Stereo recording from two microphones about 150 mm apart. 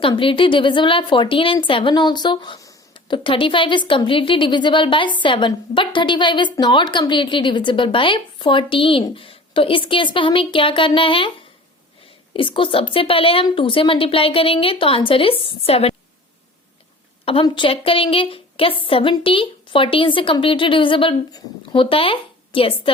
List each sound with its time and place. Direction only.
0.0 s a woman's voice: 35° left (ahead or behind)
12.3 s a woman's voice: 35° left (ahead or behind)
17.2 s a woman's voice: 35° left (ahead or behind)